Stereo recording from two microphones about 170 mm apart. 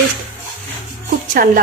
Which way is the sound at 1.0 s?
50° right (ahead or behind).